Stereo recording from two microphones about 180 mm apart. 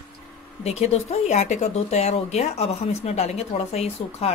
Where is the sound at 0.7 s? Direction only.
35° left (ahead or behind).